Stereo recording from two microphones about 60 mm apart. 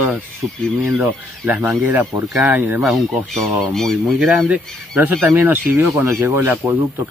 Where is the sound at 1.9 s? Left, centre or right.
Right.